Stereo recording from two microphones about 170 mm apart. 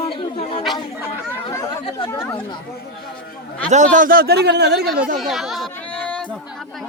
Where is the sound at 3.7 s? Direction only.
45° right (ahead or behind); by 4.9 s 80° right.